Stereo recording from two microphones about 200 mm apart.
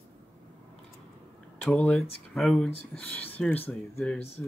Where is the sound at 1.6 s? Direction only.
10° left (ahead or behind).